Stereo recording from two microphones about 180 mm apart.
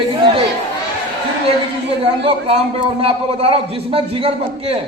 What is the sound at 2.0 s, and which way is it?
A man's voice, 30° right (ahead or behind).